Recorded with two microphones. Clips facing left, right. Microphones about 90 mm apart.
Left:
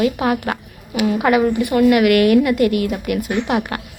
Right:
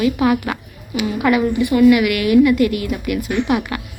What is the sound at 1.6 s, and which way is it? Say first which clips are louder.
A woman's voice: right 1 dB; 55° left (ahead or behind).